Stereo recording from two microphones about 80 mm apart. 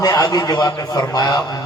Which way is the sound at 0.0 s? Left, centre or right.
Left.